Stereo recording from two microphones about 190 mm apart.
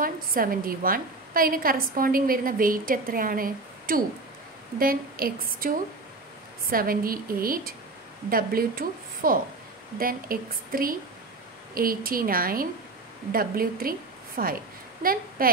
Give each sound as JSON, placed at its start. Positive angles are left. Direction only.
{"t": 0.0, "sound": "a woman's voice", "side_deg": -50}
{"t": 6.7, "sound": "a woman's voice", "side_deg": -50}